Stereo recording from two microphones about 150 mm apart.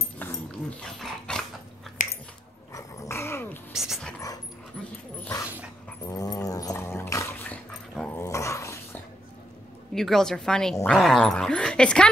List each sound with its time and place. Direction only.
0.2 s dog: 10° left (ahead or behind)
2.0 s biting: 60° left (ahead or behind)
2.7 s dog: 20° left (ahead or behind)
3.7 s speech: 5° right (ahead or behind)
6.0 s dog: 25° left (ahead or behind)
9.9 s speech: 5° left (ahead or behind)